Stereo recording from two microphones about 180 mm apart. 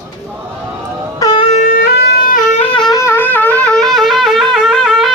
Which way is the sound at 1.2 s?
25° left (ahead or behind).